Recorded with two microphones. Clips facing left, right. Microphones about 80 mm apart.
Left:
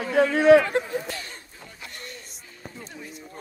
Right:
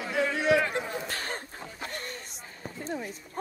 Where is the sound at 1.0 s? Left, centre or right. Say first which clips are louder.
Right 2 dB; right.